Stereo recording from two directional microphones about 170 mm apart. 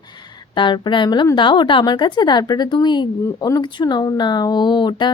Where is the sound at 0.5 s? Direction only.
30° left (ahead or behind).